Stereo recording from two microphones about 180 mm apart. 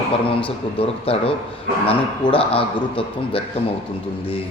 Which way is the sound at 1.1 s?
30° left (ahead or behind).